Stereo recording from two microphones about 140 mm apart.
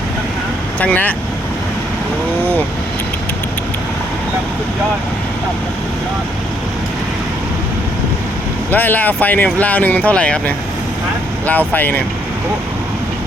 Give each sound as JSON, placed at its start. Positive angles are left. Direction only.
{"t": 0.8, "sound": "speech", "side_deg": 10}
{"t": 8.7, "sound": "speech", "side_deg": 10}